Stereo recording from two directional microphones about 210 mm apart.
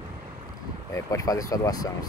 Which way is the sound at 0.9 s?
15° left (ahead or behind).